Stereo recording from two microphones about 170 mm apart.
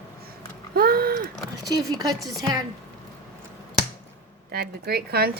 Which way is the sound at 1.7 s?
25° right (ahead or behind).